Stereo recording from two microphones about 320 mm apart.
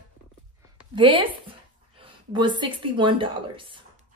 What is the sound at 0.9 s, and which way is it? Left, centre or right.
Speech, centre.